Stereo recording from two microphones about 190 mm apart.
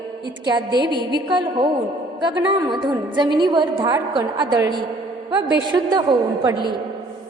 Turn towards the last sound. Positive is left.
turn(degrees=-20)  # may be behind; listen again after turning